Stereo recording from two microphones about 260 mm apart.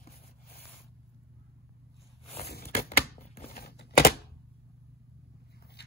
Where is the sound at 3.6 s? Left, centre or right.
Left.